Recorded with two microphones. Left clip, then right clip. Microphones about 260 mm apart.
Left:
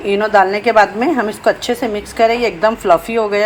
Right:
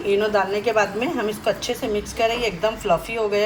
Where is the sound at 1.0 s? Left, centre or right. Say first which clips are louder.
Left 8 dB; left.